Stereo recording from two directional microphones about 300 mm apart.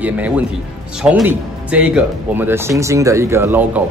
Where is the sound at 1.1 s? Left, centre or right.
Centre.